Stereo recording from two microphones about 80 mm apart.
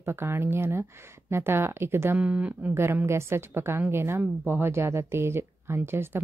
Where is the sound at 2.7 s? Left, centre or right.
Right.